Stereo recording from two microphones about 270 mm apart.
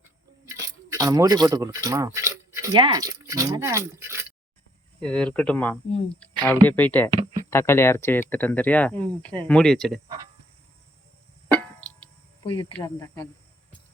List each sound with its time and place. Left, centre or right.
0.4 s speech: centre
4.9 s speech: centre
12.4 s speech: centre